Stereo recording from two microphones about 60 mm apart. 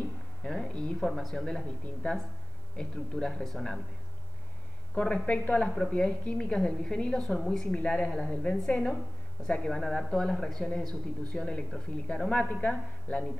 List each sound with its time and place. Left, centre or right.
0.4 s a sound: centre
0.9 s a woman's voice: centre
2.0 s a woman's voice: left; by 3.8 s centre
4.9 s a woman's voice: centre
9.7 s a woman's voice: centre